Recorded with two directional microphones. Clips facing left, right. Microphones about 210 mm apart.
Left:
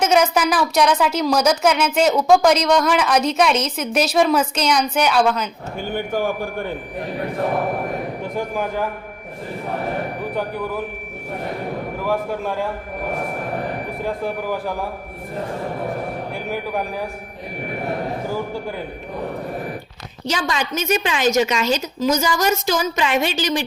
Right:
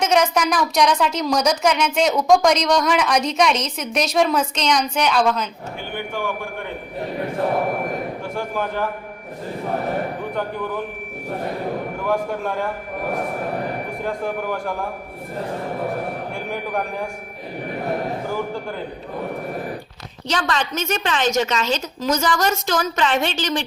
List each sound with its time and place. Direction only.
0.0 s speech: 5° left (ahead or behind)
5.9 s a man's voice: 40° left (ahead or behind)
8.2 s a woman's voice: 15° left (ahead or behind)
10.3 s speech: 5° left (ahead or behind)
12.0 s speech: centre (ahead or behind)
14.0 s speech: 5° left (ahead or behind)
16.3 s a sound: 5° left (ahead or behind)
20.2 s a woman's voice: 10° left (ahead or behind)